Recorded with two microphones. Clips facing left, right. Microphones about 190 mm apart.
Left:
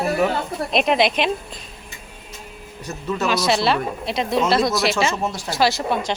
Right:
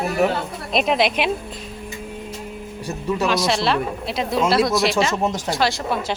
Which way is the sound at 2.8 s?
10° right (ahead or behind).